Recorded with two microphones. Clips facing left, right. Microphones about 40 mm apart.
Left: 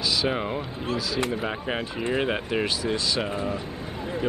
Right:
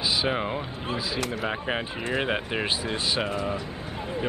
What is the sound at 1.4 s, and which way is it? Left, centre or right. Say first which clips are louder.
Speech: even; centre.